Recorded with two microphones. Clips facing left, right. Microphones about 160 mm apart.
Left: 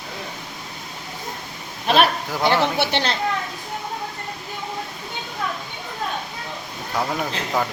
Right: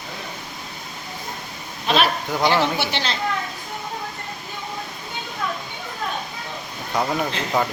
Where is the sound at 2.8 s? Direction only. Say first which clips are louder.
Left 3 dB; 60° left (ahead or behind).